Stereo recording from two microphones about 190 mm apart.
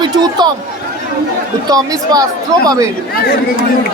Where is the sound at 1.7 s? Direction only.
20° right (ahead or behind).